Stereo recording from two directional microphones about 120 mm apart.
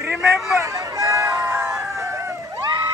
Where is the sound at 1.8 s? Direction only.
25° right (ahead or behind).